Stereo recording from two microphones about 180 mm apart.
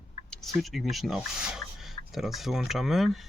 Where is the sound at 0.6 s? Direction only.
Centre (ahead or behind).